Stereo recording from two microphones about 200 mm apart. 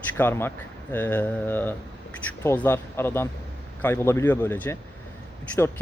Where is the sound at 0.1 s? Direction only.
10° left (ahead or behind).